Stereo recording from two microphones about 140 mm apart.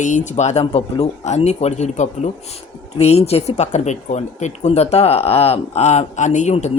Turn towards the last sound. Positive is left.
turn(degrees=55)  # may be behind; listen again after turning